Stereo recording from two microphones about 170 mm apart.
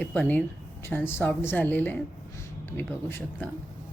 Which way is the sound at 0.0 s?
10° left (ahead or behind).